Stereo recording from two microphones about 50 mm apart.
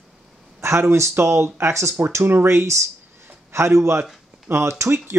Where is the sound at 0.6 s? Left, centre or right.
Right.